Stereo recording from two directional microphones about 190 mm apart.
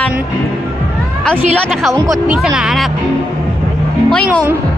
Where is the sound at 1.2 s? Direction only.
5° left (ahead or behind).